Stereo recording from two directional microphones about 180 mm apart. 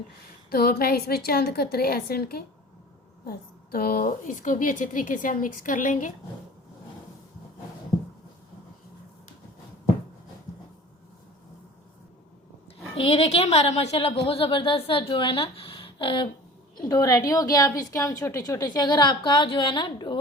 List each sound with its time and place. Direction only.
0.5 s a woman's voice: 60° left (ahead or behind)
13.0 s a woman's voice: 35° left (ahead or behind)